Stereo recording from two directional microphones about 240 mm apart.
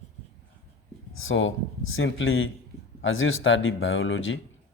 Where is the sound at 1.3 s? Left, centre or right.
Left.